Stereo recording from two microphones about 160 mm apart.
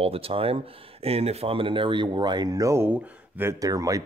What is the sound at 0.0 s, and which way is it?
Speech, 35° right (ahead or behind).